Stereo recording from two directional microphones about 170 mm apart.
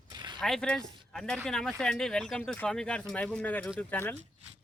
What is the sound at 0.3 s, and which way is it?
Speech, centre (ahead or behind).